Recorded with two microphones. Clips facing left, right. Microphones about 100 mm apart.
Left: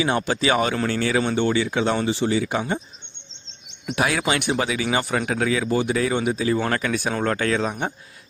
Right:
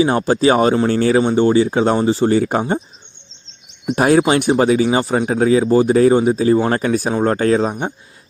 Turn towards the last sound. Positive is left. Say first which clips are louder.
# right 7 dB
turn(degrees=-35)  # may be behind; listen again after turning